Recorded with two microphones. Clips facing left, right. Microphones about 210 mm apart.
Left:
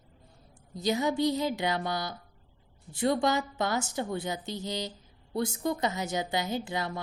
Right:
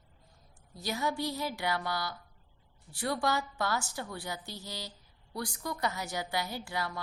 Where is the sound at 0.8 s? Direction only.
20° left (ahead or behind).